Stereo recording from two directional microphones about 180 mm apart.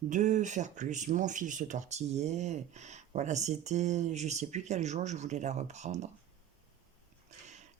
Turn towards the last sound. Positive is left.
turn(degrees=-40)  # may be behind; listen again after turning